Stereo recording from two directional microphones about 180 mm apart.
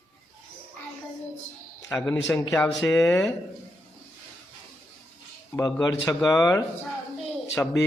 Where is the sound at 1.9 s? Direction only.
10° left (ahead or behind).